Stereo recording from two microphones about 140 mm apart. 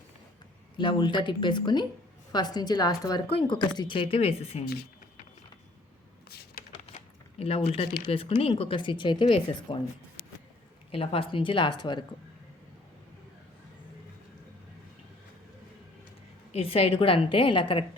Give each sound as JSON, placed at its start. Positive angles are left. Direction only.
{"t": 0.8, "sound": "a woman's voice", "side_deg": 35}
{"t": 4.6, "sound": "a sound", "side_deg": 90}
{"t": 6.8, "sound": "a sound", "side_deg": 45}
{"t": 8.0, "sound": "speech", "side_deg": 40}
{"t": 10.9, "sound": "speech", "side_deg": 40}
{"t": 16.5, "sound": "speech", "side_deg": 45}